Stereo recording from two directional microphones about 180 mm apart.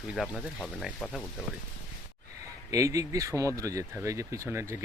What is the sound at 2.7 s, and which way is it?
Speech, 20° right (ahead or behind).